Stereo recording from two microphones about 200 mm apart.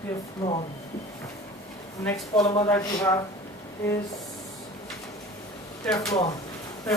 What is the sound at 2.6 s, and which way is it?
Speech, 15° left (ahead or behind).